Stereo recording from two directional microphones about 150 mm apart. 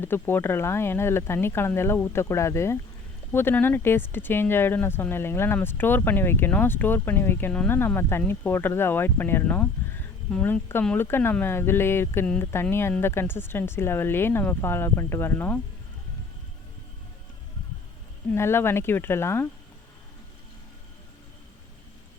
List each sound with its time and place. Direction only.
0.0 s speech: 15° left (ahead or behind)
18.3 s speech: 15° left (ahead or behind)